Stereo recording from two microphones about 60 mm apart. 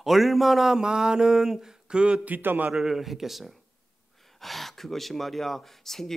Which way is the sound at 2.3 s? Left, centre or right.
Right.